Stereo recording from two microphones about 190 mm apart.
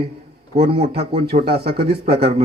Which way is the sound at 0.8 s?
55° right (ahead or behind).